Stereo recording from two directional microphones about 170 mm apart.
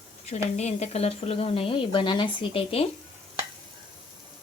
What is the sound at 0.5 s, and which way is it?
Speech, 40° left (ahead or behind).